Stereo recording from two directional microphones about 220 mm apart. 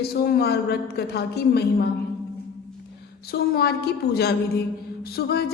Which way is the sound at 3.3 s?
45° left (ahead or behind).